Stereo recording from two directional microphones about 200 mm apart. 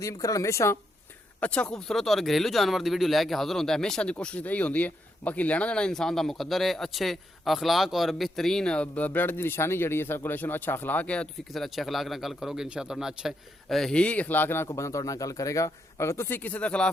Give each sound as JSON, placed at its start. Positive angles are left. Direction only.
{"t": 0.0, "sound": "speech", "side_deg": 15}